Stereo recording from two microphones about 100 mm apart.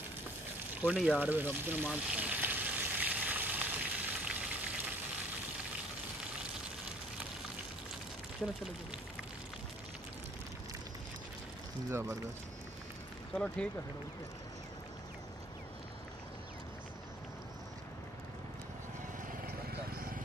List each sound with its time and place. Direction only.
0.7 s speech: 10° right (ahead or behind)
1.9 s frying: 10° right (ahead or behind)
11.9 s speech: 25° right (ahead or behind)
13.3 s speech: 10° left (ahead or behind)